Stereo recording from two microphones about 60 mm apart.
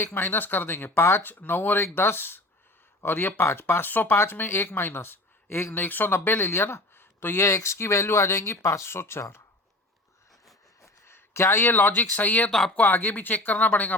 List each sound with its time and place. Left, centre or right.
0.0 s speech: left
1.2 s speech: left
7.4 s speech: left
11.0 s a sound: left
11.7 s speech: left
12.5 s speech: centre
12.7 s speech: left